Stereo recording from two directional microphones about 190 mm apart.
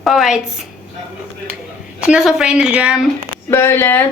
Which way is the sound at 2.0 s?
5° right (ahead or behind).